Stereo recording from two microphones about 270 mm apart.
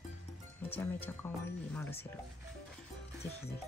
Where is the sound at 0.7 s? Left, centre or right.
Centre.